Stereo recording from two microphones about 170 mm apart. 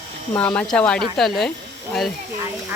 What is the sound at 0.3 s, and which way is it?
Speech, 10° left (ahead or behind).